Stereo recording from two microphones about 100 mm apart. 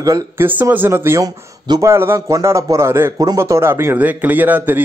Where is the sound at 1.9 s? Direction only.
25° right (ahead or behind).